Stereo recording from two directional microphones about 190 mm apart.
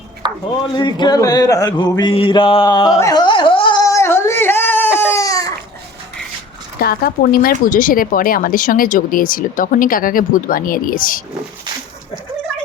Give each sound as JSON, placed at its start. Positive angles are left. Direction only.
{"t": 0.2, "sound": "a sound", "side_deg": -25}
{"t": 0.6, "sound": "speech", "side_deg": 25}
{"t": 5.1, "sound": "crying", "side_deg": 20}
{"t": 6.7, "sound": "speech", "side_deg": 50}